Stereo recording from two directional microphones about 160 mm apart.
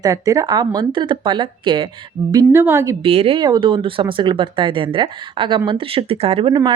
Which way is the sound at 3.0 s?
35° right (ahead or behind).